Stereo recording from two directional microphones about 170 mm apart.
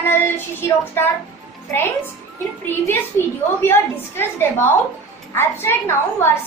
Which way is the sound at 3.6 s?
15° left (ahead or behind).